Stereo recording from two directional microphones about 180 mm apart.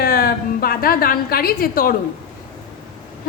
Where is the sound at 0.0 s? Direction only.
55° left (ahead or behind).